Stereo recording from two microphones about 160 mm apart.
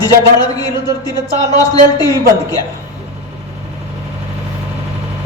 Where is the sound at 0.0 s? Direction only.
25° left (ahead or behind).